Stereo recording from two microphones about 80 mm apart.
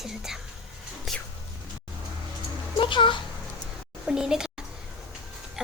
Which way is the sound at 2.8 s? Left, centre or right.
Left.